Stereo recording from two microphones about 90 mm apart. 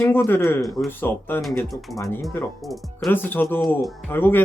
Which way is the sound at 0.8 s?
20° left (ahead or behind).